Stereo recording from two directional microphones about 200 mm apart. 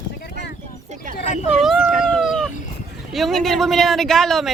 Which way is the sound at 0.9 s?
40° right (ahead or behind).